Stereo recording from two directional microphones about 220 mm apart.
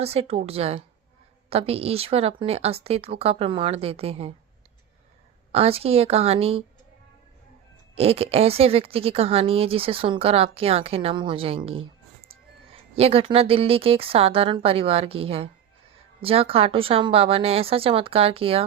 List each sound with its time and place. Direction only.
0.0 s a woman's voice: 25° right (ahead or behind)
5.5 s a woman's voice: 25° right (ahead or behind)
7.9 s a woman's voice: 25° right (ahead or behind)
13.0 s a woman's voice: 25° right (ahead or behind)